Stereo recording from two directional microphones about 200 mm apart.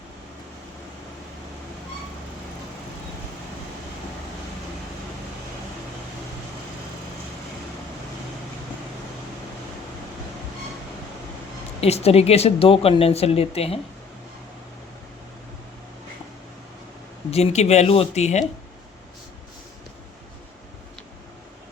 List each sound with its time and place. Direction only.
11.8 s speech: 30° left (ahead or behind)
17.3 s speech: 30° left (ahead or behind)